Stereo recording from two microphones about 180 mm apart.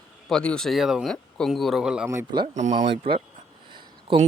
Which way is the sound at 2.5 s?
40° right (ahead or behind).